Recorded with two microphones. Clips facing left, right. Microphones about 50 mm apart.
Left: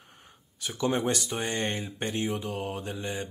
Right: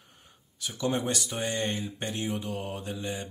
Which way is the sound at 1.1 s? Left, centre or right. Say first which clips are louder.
Left 1 dB; centre.